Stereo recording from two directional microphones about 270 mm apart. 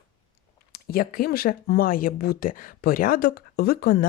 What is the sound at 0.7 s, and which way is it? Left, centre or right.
Speech, left.